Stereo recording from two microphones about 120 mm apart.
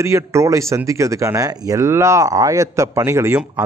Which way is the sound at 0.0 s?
25° right (ahead or behind).